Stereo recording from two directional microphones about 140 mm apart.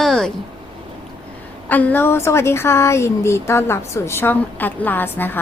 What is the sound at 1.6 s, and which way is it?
A woman's voice, 10° left (ahead or behind).